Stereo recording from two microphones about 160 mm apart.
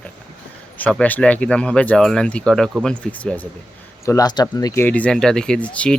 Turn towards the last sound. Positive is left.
turn(degrees=10)  # may be behind; listen again after turning